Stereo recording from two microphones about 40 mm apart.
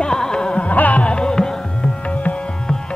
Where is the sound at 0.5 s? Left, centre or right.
Left.